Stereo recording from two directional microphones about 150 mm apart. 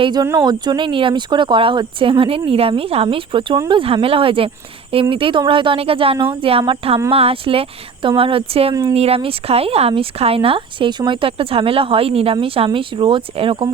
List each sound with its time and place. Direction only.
0.0 s speech: 25° right (ahead or behind)